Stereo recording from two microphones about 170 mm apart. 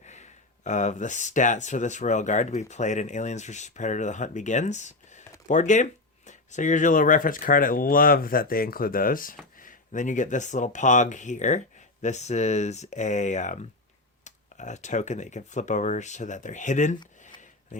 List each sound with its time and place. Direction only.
0.0 s speech: 45° left (ahead or behind)